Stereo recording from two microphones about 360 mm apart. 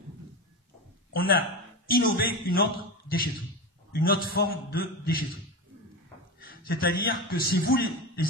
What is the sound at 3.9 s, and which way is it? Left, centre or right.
A man's voice, left.